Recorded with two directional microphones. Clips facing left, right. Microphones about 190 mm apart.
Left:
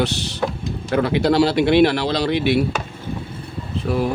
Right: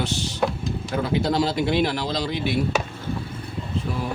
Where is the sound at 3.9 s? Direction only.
75° left (ahead or behind).